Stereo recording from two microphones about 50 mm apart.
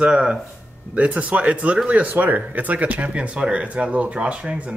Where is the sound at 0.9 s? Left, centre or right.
Right.